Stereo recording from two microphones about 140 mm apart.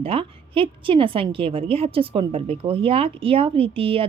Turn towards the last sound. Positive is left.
turn(degrees=-40)  # may be behind; listen again after turning